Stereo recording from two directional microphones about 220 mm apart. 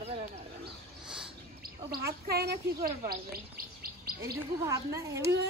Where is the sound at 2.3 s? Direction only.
45° right (ahead or behind).